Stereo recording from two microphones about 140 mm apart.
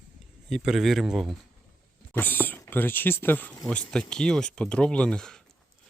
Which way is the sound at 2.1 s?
15° left (ahead or behind).